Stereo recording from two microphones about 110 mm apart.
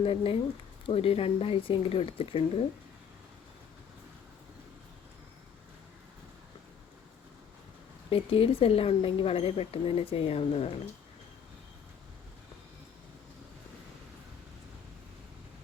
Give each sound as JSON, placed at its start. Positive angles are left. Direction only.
{"t": 0.0, "sound": "speech", "side_deg": 60}
{"t": 8.1, "sound": "speech", "side_deg": 60}